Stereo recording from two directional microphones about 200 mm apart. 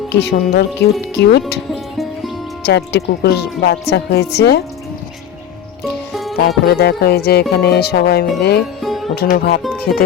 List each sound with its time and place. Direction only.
0.1 s speech: 55° left (ahead or behind)
1.7 s music: centre (ahead or behind)
2.6 s speech: 55° left (ahead or behind)
6.7 s speech: 55° left (ahead or behind)
8.8 s music: centre (ahead or behind)
9.3 s speech: 50° left (ahead or behind)